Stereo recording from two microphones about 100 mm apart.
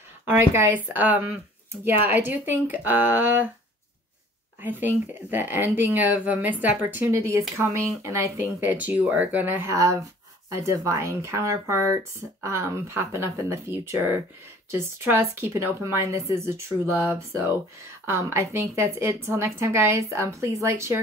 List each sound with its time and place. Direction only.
0.3 s speech: 25° right (ahead or behind)
4.6 s speech: 20° right (ahead or behind)
8.5 s speech: 15° right (ahead or behind)